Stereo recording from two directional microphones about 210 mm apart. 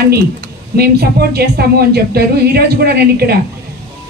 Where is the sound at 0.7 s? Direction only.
50° right (ahead or behind).